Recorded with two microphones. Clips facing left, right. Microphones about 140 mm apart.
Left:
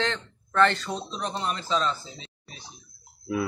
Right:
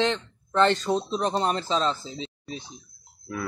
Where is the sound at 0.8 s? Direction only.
35° right (ahead or behind).